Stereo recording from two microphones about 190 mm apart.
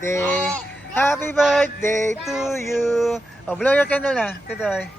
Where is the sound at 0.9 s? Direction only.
10° left (ahead or behind).